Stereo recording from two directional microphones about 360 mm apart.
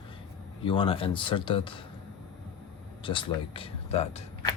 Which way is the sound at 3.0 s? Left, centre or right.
Centre.